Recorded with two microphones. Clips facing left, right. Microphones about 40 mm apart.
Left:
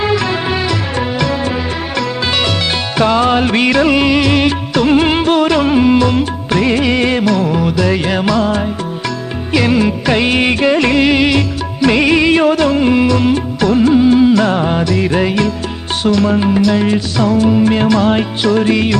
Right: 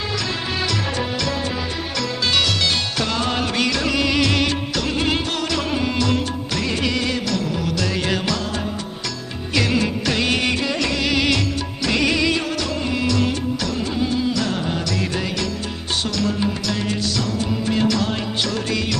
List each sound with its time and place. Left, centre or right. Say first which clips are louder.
0.1 s music: left 10 dB; left
4.1 s music: left 7 dB; centre; by 7.3 s left
7.3 s music: left 9 dB; left
8.4 s music: left 12 dB; left
9.5 s music: left 7 dB; centre
10.1 s music: left 7 dB; left
14.8 s music: left 10 dB; left
17.6 s music: left 9 dB; left